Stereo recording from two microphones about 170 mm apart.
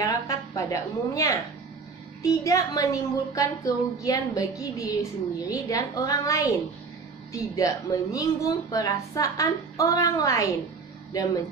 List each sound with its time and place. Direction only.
0.0 s a woman's voice: 20° left (ahead or behind)